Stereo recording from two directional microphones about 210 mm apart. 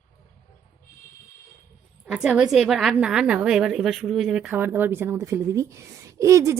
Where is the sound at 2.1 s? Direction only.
5° right (ahead or behind).